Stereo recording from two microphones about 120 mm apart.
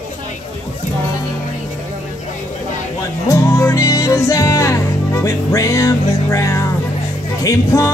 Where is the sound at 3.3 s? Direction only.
25° left (ahead or behind).